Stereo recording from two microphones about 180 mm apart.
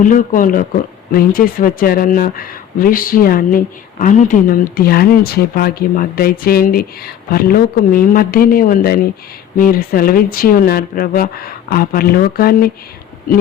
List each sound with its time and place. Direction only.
0.0 s speech: 45° left (ahead or behind)